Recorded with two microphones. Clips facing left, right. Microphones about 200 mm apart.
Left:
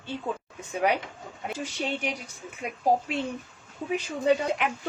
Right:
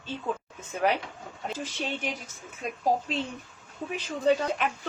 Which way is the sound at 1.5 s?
15° left (ahead or behind).